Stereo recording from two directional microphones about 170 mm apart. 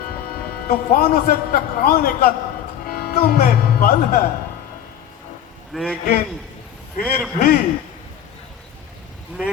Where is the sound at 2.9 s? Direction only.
60° left (ahead or behind).